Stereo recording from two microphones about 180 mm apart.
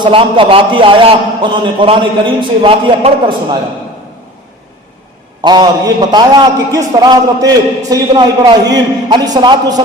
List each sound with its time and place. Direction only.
0.0 s a man's voice: 30° right (ahead or behind)
5.4 s a man's voice: 25° right (ahead or behind)